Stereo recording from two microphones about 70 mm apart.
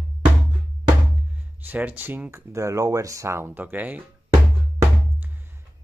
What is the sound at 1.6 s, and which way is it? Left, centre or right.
Speech, right.